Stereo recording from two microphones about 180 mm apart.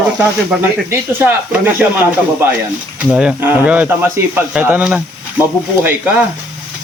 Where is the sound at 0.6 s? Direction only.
10° right (ahead or behind).